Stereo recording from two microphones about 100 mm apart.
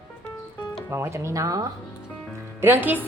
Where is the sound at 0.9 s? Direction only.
25° right (ahead or behind).